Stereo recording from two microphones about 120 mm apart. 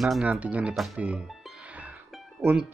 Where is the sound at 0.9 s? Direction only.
10° right (ahead or behind).